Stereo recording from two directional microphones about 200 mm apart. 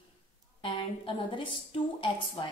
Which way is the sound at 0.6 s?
25° left (ahead or behind).